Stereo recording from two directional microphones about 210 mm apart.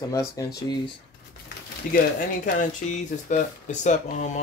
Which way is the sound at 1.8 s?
40° left (ahead or behind).